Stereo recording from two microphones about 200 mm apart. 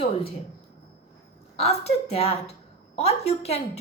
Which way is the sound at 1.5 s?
30° left (ahead or behind).